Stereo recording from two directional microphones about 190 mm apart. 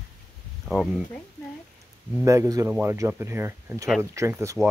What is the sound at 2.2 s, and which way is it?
Speech, 15° right (ahead or behind).